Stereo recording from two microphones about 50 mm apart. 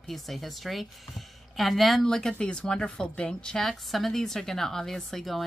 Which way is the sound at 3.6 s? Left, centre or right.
Centre.